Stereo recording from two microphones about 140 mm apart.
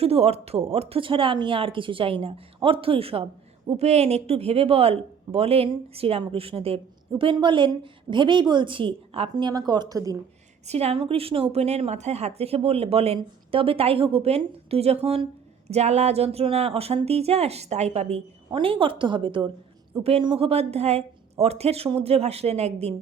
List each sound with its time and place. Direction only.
0.0 s a woman's voice: 45° right (ahead or behind)
9.3 s a woman's voice: 25° right (ahead or behind)
10.7 s a woman's voice: 50° right (ahead or behind)
18.5 s a woman's voice: 40° right (ahead or behind)